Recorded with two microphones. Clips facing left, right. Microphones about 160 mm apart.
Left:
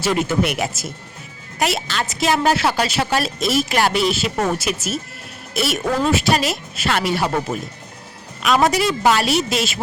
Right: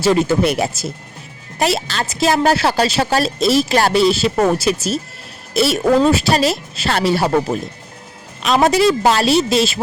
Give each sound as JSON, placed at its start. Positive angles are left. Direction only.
{"t": 0.0, "sound": "a woman's voice", "side_deg": -30}